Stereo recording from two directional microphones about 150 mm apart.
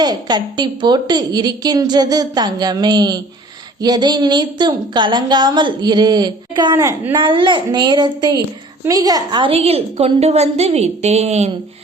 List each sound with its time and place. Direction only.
0.0 s a woman's voice: 25° right (ahead or behind); by 11.5 s 45° right (ahead or behind)